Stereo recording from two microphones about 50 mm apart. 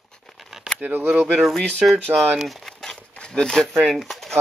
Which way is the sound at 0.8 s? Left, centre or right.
Right.